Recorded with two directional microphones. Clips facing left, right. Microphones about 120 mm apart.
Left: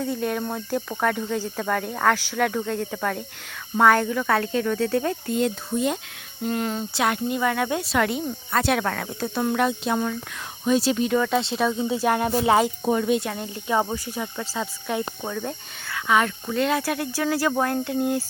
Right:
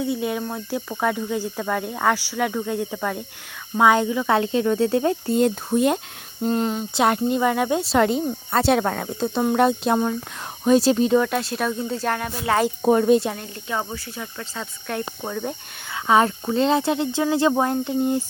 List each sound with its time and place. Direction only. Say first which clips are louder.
0.0 s cricket: right 1 dB; 10° right (ahead or behind)
4.3 s speech: right 4 dB; 25° right (ahead or behind)
5.7 s speech: right 6 dB; 60° right (ahead or behind)
6.4 s speech: right 3 dB; 30° right (ahead or behind)
9.6 s speech: right 4 dB; 40° right (ahead or behind)
11.2 s speech: even; 5° right (ahead or behind)
12.2 s speech: left 4 dB; 25° left (ahead or behind)
12.8 s speech: right 5 dB; 45° right (ahead or behind)
13.3 s speech: left 4 dB; 15° left (ahead or behind)
15.2 s cricket: right 1 dB; 5° right (ahead or behind)
15.9 s speech: right 4 dB; 30° right (ahead or behind)